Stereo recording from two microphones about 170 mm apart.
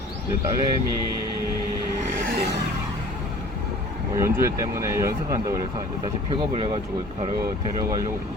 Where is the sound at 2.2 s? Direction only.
70° right (ahead or behind).